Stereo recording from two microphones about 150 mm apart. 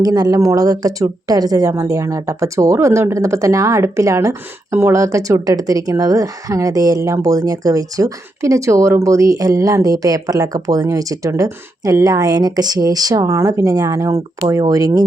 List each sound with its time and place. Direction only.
0.0 s speech: 25° right (ahead or behind)